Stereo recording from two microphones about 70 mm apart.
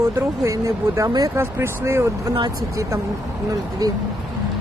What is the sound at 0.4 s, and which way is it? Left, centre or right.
Speech, right.